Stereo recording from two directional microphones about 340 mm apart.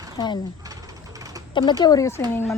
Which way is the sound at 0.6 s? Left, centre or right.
Centre.